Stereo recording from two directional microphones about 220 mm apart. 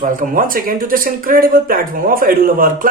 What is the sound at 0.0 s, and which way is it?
Speech, 40° right (ahead or behind).